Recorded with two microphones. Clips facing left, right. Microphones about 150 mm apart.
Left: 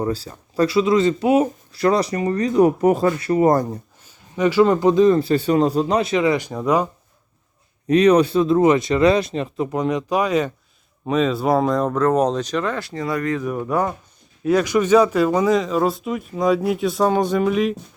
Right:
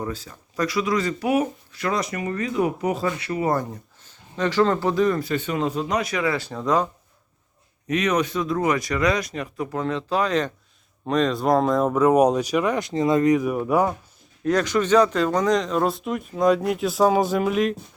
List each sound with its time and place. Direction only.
0.0 s speech: 35° left (ahead or behind)
4.0 s speech: 10° left (ahead or behind)
7.9 s speech: 35° left (ahead or behind); by 13.9 s 10° right (ahead or behind)
14.4 s speech: 10° left (ahead or behind)